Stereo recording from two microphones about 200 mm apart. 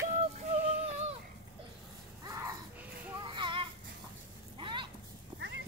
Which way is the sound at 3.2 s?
25° right (ahead or behind).